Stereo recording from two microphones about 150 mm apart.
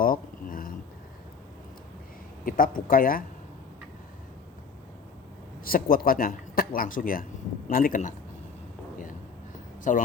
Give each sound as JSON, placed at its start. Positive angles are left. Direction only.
{"t": 0.0, "sound": "a sound", "side_deg": 70}
{"t": 2.4, "sound": "speech", "side_deg": 65}
{"t": 5.6, "sound": "speech", "side_deg": 75}
{"t": 9.9, "sound": "speech", "side_deg": 60}